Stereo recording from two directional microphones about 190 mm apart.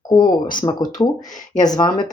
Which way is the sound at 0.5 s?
25° left (ahead or behind).